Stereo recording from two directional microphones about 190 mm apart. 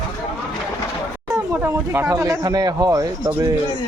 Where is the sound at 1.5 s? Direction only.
10° right (ahead or behind).